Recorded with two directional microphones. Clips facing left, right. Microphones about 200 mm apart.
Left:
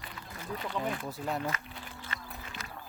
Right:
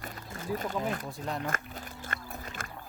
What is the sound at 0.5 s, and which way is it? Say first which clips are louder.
Speech: right 3 dB; 45° right (ahead or behind).